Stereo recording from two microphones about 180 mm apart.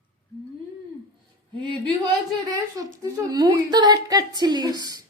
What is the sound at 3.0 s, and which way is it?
Speech, 20° right (ahead or behind).